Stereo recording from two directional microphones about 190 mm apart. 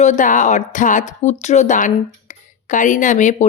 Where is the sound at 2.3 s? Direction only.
40° left (ahead or behind).